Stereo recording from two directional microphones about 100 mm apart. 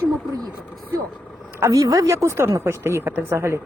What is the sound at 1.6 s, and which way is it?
Speech, 30° right (ahead or behind).